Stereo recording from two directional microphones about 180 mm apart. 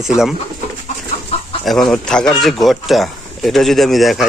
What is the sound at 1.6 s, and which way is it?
Speech, centre (ahead or behind).